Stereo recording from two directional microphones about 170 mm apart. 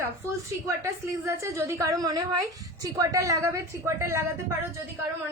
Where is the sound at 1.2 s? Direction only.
15° right (ahead or behind).